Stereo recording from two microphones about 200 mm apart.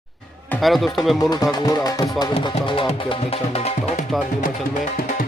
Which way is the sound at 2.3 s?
30° left (ahead or behind).